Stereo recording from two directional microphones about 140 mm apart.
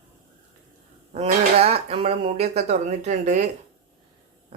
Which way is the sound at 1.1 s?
45° right (ahead or behind).